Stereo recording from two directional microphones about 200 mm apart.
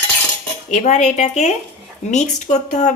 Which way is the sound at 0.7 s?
35° left (ahead or behind).